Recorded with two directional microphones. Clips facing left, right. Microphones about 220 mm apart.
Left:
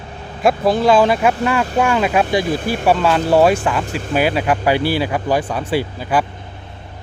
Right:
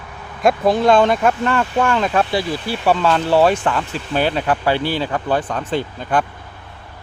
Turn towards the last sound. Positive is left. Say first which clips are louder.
# left 2 dB
turn(degrees=5)  # may be behind; listen again after turning